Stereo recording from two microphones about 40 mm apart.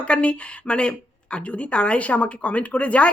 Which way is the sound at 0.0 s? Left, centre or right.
Left.